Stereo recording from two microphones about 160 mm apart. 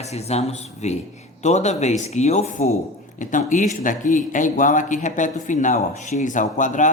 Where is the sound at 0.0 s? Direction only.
40° left (ahead or behind).